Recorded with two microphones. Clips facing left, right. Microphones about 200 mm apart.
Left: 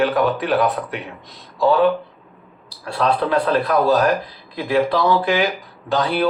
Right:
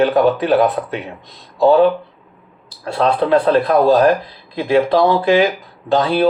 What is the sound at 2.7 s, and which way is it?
Speech, 25° right (ahead or behind).